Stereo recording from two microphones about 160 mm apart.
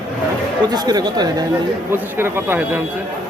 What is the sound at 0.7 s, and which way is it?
Speech, 25° right (ahead or behind).